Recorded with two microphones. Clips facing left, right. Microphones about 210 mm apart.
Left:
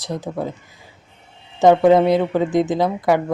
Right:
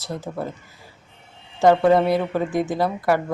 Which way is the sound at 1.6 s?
20° left (ahead or behind).